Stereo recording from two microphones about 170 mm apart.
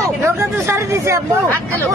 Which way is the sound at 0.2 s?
15° right (ahead or behind).